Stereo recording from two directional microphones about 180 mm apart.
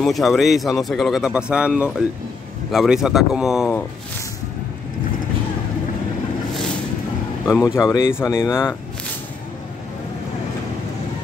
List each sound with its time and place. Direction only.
0.0 s speech: centre (ahead or behind)
7.4 s speech: 15° left (ahead or behind)